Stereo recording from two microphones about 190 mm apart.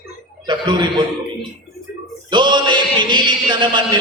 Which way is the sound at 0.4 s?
25° right (ahead or behind).